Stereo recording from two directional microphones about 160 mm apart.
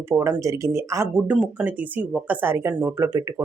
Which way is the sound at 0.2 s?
20° right (ahead or behind).